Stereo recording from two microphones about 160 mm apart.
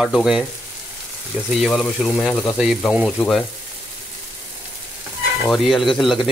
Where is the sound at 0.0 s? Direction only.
5° right (ahead or behind).